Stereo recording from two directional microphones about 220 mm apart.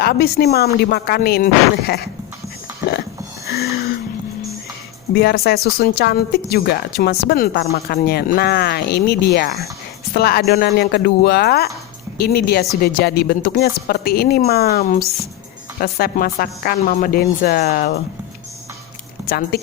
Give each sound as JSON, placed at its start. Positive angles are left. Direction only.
{"t": 0.0, "sound": "speech", "side_deg": 45}
{"t": 3.4, "sound": "a sound", "side_deg": 45}
{"t": 5.1, "sound": "speech", "side_deg": 45}
{"t": 19.3, "sound": "speech", "side_deg": 45}